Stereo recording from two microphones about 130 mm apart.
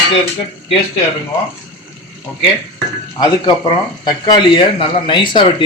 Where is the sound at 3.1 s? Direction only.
35° left (ahead or behind).